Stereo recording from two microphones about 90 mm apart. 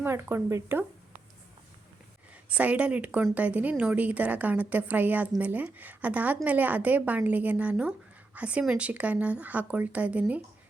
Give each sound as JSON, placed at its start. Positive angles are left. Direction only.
{"t": 0.0, "sound": "speech", "side_deg": -25}
{"t": 2.5, "sound": "a woman's voice", "side_deg": -15}